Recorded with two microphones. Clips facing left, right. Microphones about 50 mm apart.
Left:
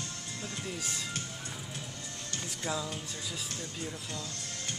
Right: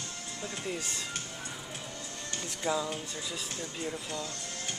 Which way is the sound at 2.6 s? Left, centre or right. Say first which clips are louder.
Right 5 dB; centre.